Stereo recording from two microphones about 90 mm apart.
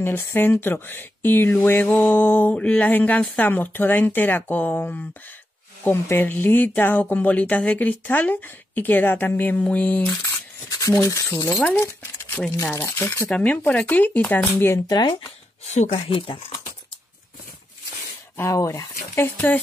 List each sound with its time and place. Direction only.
0.0 s speech: 25° left (ahead or behind)
10.7 s speech: 40° left (ahead or behind)
12.0 s speech: 20° left (ahead or behind)
13.3 s speech: 15° left (ahead or behind)
14.9 s speech: 55° left (ahead or behind)
16.1 s speech: 80° left
18.4 s speech: 35° left (ahead or behind)
19.3 s speech: 20° left (ahead or behind)